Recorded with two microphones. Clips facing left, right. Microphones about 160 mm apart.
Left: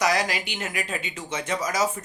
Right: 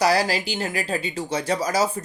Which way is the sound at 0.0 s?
30° right (ahead or behind).